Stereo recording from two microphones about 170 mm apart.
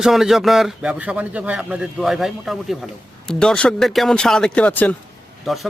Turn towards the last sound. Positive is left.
turn(degrees=0)  # may be behind; listen again after turning